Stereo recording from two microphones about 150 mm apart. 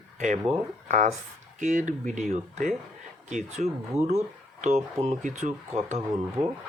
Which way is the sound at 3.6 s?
45° right (ahead or behind).